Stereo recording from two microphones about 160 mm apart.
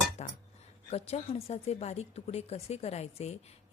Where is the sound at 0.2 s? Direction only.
45° left (ahead or behind).